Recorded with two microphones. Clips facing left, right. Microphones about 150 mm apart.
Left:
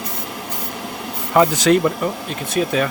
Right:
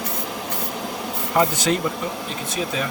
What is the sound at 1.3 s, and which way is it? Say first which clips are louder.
Speech: left 6 dB; 90° left.